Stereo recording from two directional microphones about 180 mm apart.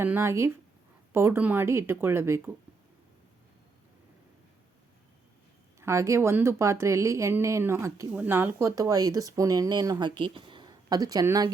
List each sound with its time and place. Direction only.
0.0 s a woman's voice: 15° right (ahead or behind)
5.8 s a woman's voice: 15° right (ahead or behind)